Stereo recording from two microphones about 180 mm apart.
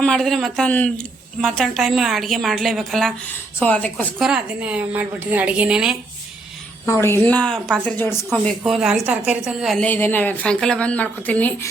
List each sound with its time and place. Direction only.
0.0 s a woman's voice: 5° left (ahead or behind)
4.2 s a woman's voice: 5° right (ahead or behind)
7.0 s a woman's voice: 10° left (ahead or behind)